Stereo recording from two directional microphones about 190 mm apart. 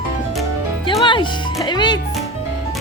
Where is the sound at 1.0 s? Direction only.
25° left (ahead or behind).